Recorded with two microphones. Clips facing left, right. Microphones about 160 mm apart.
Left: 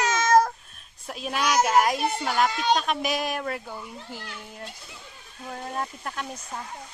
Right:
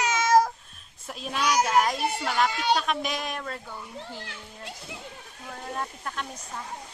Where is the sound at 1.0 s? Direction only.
Centre (ahead or behind).